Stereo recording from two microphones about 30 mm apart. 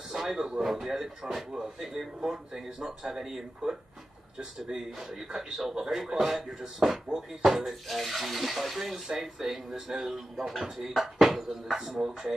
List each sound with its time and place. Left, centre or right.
0.1 s speech: centre
5.3 s speech: centre
7.6 s speech: centre
11.9 s speech: right